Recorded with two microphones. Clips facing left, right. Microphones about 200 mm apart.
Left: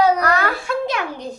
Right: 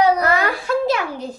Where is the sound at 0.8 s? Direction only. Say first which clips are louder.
Right 3 dB; 5° right (ahead or behind).